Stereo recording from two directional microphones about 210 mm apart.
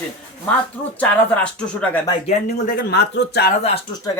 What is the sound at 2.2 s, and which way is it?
Speech, 45° left (ahead or behind).